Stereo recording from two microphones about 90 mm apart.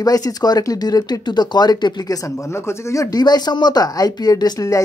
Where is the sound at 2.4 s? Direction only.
30° left (ahead or behind).